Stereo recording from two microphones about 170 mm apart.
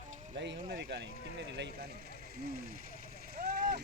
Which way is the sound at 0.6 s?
60° right (ahead or behind).